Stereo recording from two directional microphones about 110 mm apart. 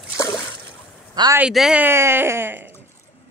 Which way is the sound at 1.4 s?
5° right (ahead or behind).